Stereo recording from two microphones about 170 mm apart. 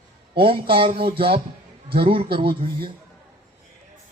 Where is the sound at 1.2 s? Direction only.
30° right (ahead or behind).